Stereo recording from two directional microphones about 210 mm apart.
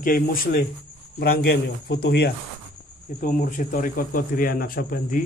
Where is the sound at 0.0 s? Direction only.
45° left (ahead or behind).